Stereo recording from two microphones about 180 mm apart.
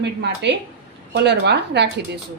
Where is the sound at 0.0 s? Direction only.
70° right (ahead or behind).